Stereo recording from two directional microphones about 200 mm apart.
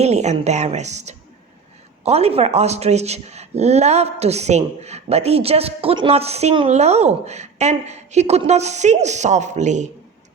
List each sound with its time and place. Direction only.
0.0 s speech: 35° right (ahead or behind)